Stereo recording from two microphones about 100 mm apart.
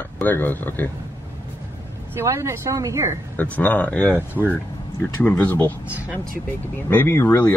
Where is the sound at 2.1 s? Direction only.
30° right (ahead or behind).